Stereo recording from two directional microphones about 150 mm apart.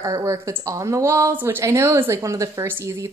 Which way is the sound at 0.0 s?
20° right (ahead or behind).